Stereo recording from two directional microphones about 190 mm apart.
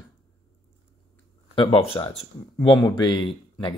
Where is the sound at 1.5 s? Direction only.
25° left (ahead or behind).